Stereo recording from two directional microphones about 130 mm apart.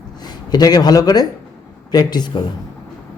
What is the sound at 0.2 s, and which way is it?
A man's voice, 30° left (ahead or behind).